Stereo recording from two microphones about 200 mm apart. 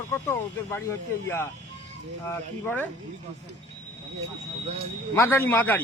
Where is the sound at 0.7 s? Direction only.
10° left (ahead or behind).